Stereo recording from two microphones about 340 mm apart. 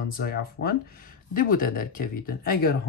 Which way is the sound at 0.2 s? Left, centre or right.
Left.